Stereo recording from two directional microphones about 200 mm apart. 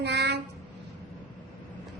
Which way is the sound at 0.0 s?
55° right (ahead or behind).